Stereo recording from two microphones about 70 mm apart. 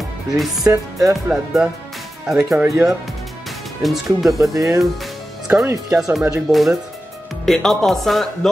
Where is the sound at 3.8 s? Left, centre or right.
Centre.